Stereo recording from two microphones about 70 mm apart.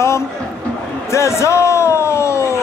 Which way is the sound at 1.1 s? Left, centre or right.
Left.